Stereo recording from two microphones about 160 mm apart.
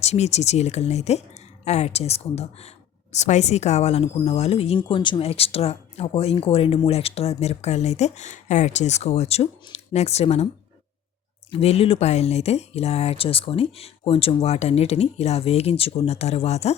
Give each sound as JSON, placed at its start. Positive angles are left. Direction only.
{"t": 0.0, "sound": "a woman's voice", "side_deg": 45}
{"t": 11.5, "sound": "a woman's voice", "side_deg": 40}